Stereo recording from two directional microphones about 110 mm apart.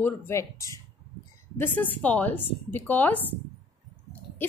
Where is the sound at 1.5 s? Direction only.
15° left (ahead or behind).